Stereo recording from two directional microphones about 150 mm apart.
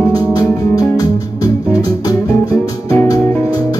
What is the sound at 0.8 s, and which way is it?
Music, 25° left (ahead or behind).